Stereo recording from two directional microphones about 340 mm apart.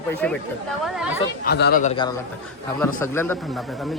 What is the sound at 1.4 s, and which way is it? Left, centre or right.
Speech, left.